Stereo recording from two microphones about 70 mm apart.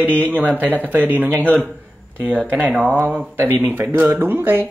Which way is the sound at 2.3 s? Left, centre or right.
Right.